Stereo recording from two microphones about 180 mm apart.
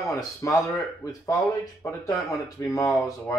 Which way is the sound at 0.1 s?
15° left (ahead or behind).